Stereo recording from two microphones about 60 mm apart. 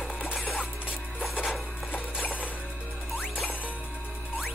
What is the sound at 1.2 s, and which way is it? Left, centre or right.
Music, centre.